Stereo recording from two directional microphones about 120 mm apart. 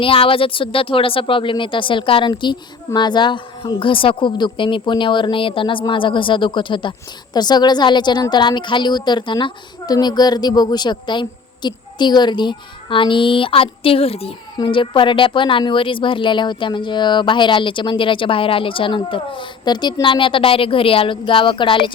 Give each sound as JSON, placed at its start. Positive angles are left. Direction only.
{"t": 0.0, "sound": "a woman's voice", "side_deg": 50}